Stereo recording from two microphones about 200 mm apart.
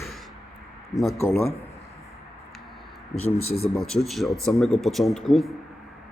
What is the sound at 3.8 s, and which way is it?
Speech, centre (ahead or behind).